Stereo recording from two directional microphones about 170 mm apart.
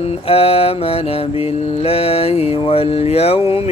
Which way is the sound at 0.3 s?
35° left (ahead or behind).